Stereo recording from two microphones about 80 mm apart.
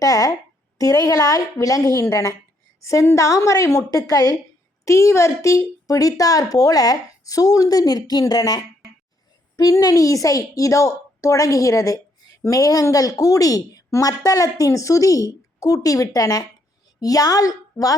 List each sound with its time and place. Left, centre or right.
0.0 s a sound: left
0.8 s a woman's voice: left
4.9 s a woman's voice: left